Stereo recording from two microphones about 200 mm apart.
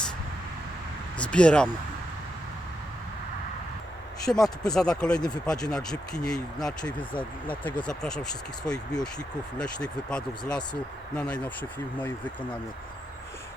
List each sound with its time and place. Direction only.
1.2 s speech: 5° left (ahead or behind)
4.3 s speech: 10° left (ahead or behind)
8.6 s speech: 20° left (ahead or behind)
9.1 s speech: 5° left (ahead or behind)